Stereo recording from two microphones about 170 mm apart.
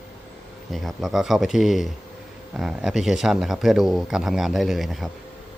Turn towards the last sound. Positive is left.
turn(degrees=0)  # may be behind; listen again after turning